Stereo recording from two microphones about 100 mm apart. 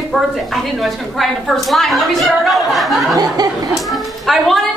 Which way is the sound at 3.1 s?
40° right (ahead or behind).